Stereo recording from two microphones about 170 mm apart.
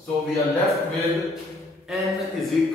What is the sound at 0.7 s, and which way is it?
A man's voice, centre (ahead or behind).